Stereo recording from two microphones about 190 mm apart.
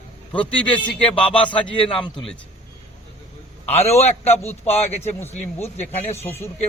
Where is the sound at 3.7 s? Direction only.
35° left (ahead or behind).